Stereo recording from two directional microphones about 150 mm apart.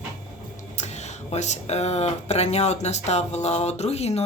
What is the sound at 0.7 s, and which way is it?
Speech, 50° left (ahead or behind).